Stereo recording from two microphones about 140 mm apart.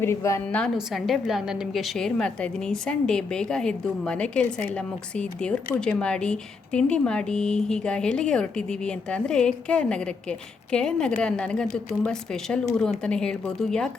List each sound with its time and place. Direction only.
0.0 s a woman's voice: 20° left (ahead or behind)
0.8 s a woman's voice: centre (ahead or behind)